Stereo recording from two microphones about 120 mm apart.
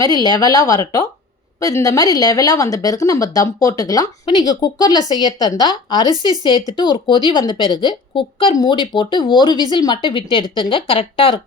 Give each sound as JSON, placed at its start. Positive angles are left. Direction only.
{"t": 0.0, "sound": "speech", "side_deg": 35}